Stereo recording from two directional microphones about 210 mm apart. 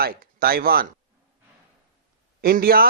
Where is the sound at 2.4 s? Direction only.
45° right (ahead or behind).